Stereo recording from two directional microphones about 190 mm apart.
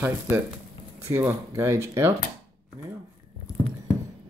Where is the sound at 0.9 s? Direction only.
15° right (ahead or behind).